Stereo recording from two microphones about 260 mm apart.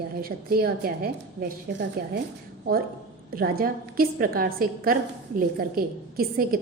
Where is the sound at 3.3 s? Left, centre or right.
Right.